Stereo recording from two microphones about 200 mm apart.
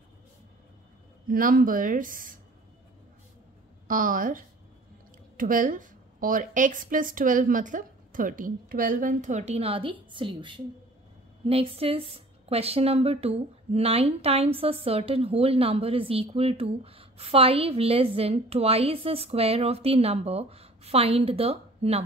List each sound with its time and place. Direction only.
1.2 s a woman's voice: 45° right (ahead or behind)
3.8 s a woman's voice: 45° right (ahead or behind)